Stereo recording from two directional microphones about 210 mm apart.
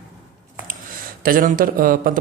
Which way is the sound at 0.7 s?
40° right (ahead or behind).